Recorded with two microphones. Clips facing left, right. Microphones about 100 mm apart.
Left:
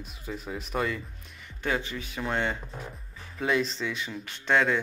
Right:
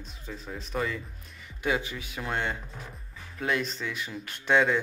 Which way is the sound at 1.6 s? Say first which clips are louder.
Right 1 dB; 10° right (ahead or behind).